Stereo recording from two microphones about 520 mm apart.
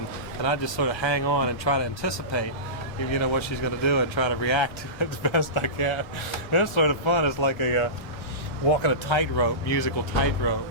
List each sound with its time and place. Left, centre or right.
0.4 s speech: left
8.8 s speech: left